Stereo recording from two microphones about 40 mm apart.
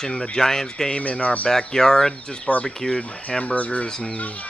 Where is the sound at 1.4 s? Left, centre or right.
Centre.